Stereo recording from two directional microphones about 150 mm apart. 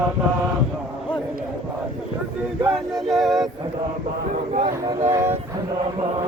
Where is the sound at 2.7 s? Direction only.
Centre (ahead or behind).